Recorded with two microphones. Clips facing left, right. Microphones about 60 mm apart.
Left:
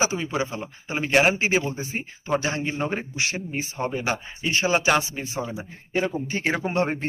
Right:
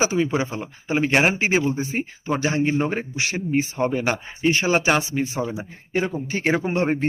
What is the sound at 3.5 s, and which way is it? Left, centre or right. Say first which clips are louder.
Speech: right 6 dB; right.